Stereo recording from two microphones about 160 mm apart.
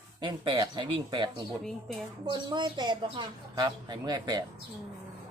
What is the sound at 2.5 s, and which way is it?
A woman's voice, 25° right (ahead or behind).